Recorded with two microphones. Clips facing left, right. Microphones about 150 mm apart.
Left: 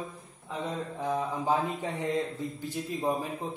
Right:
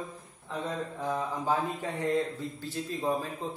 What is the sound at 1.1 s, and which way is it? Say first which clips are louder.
Speech: left 2 dB; 20° left (ahead or behind).